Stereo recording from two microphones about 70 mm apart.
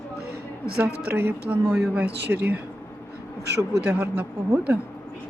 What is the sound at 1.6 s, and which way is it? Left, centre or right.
Speech, centre.